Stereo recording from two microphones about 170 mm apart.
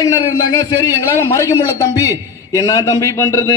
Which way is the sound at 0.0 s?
20° left (ahead or behind).